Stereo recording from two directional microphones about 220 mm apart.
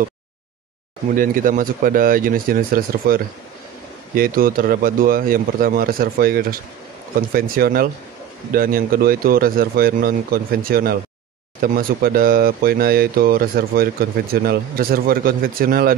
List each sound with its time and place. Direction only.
1.1 s speech: 40° right (ahead or behind)